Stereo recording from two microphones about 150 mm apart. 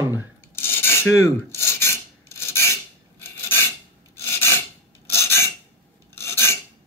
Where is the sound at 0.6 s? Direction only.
15° left (ahead or behind).